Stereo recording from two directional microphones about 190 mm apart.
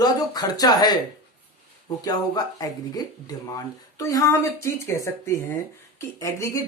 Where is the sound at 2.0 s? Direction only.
20° left (ahead or behind).